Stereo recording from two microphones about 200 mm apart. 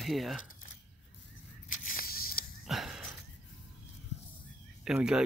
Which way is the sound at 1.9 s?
45° left (ahead or behind).